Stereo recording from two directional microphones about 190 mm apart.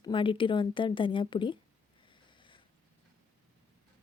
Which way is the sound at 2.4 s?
25° left (ahead or behind).